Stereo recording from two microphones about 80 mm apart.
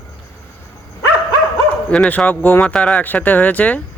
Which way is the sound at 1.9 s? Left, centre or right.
Centre.